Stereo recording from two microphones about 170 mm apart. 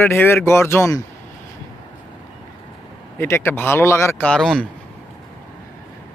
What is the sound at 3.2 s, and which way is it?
Speech, 15° left (ahead or behind).